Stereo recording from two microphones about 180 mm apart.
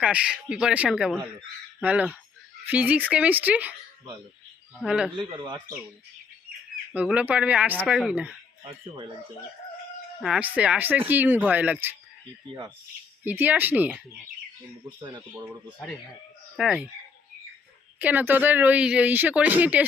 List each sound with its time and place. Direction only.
0.0 s speech: 5° right (ahead or behind)
4.8 s speech: 5° right (ahead or behind)
5.4 s speech: 25° right (ahead or behind)
6.9 s speech: 5° right (ahead or behind)
10.2 s speech: centre (ahead or behind)
13.2 s speech: 10° right (ahead or behind)
14.9 s speech: 25° right (ahead or behind)
16.6 s speech: 5° right (ahead or behind)
18.0 s speech: 10° right (ahead or behind)